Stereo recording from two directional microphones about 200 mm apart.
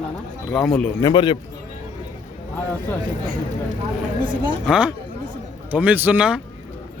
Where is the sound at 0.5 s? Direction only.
5° left (ahead or behind).